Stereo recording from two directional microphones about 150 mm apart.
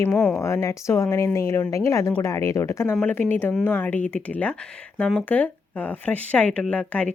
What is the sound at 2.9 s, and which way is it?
A woman's voice, 10° left (ahead or behind).